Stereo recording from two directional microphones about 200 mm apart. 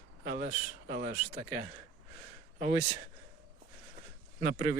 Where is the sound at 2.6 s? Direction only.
30° right (ahead or behind).